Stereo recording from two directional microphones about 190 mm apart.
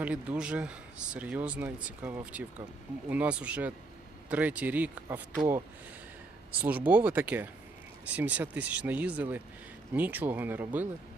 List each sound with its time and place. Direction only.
0.0 s speech: 5° right (ahead or behind)
6.6 s speech: 10° right (ahead or behind)